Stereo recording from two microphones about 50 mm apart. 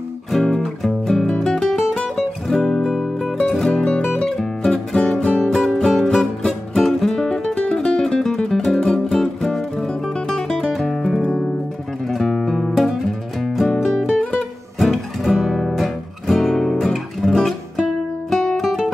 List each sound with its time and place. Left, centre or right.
0.3 s music: centre
3.3 s music: centre
14.3 s guitar: centre
18.3 s music: centre